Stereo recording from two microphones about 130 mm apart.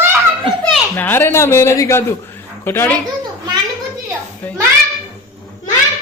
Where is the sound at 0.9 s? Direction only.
15° left (ahead or behind).